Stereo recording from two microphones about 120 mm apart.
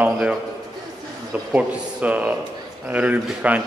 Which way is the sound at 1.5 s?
10° right (ahead or behind).